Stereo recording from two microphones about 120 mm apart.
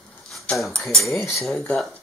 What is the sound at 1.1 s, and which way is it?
Cutlery, 25° left (ahead or behind).